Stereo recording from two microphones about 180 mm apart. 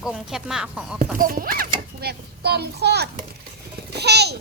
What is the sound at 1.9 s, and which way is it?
A child's voice, 65° right (ahead or behind).